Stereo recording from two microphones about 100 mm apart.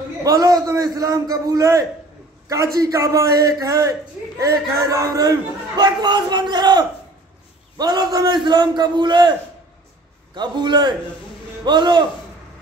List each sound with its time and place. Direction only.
0.2 s a man's voice: 35° right (ahead or behind)
10.3 s a man's voice: 50° right (ahead or behind)